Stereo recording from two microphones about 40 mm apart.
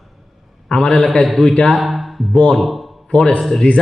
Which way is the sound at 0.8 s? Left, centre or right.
Left.